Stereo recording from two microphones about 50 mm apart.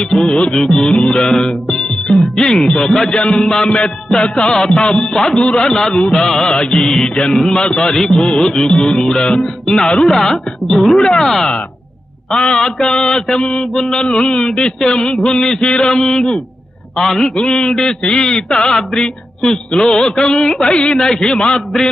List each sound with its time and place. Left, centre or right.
0.3 s music: centre
0.5 s music: centre
2.4 s music: centre